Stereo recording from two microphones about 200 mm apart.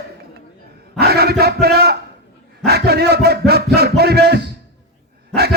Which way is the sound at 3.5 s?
55° right (ahead or behind).